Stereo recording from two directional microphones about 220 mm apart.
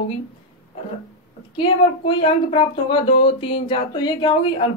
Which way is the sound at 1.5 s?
20° left (ahead or behind).